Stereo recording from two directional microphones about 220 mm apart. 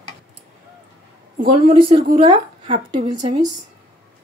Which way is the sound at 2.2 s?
25° right (ahead or behind).